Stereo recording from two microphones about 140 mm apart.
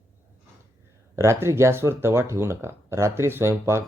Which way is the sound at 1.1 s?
20° right (ahead or behind).